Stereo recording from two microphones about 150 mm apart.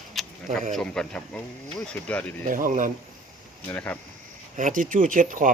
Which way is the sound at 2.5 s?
65° right (ahead or behind).